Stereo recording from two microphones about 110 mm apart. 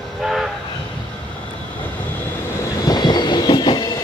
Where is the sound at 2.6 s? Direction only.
40° left (ahead or behind).